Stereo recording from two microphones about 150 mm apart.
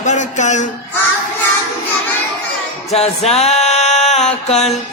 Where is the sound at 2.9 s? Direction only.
45° left (ahead or behind).